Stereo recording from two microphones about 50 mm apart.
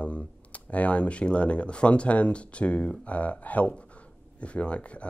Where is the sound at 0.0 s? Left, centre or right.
Left.